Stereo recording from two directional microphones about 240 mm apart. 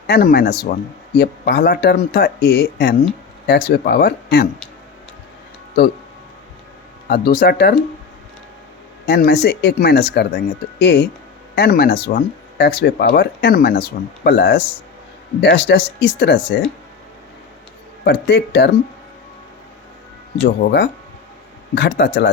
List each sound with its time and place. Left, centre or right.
0.1 s speech: left
5.8 s speech: left
7.1 s speech: left
9.0 s speech: left
18.0 s speech: left
20.6 s speech: left